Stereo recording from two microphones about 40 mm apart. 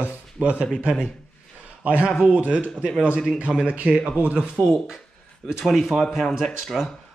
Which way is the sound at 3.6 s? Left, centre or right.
Right.